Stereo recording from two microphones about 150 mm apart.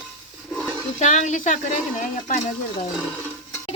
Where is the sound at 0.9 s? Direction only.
55° left (ahead or behind).